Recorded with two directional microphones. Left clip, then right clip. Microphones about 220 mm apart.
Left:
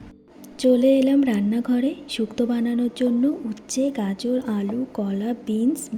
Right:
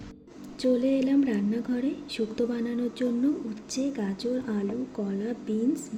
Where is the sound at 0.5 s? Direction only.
30° left (ahead or behind).